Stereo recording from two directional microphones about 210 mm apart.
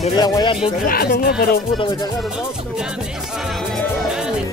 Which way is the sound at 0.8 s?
45° left (ahead or behind).